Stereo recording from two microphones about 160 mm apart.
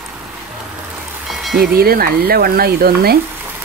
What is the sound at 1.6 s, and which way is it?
Speech, 70° right (ahead or behind).